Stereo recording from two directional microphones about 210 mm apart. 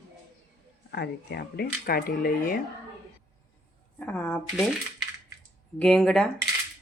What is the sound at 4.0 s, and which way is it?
Speech, 10° left (ahead or behind).